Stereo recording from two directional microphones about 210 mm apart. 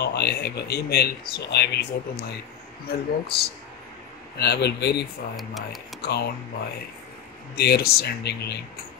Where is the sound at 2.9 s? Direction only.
50° left (ahead or behind).